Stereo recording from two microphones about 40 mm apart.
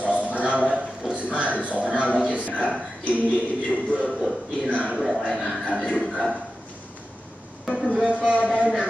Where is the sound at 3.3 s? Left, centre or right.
Left.